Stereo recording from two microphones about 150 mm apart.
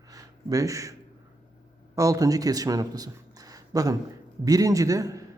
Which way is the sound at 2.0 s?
20° right (ahead or behind).